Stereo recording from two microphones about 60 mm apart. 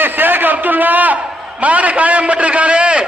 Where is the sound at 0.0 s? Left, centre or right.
Right.